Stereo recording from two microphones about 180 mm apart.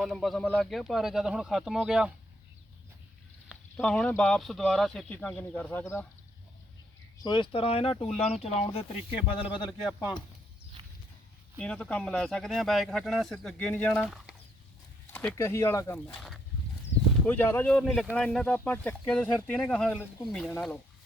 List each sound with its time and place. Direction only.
0.0 s speech: centre (ahead or behind)
3.8 s speech: 5° left (ahead or behind)
7.2 s speech: 25° left (ahead or behind)
11.5 s speech: 5° left (ahead or behind)
15.1 s speech: 10° left (ahead or behind)